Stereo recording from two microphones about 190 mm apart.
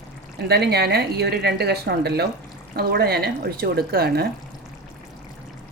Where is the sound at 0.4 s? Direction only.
60° right (ahead or behind).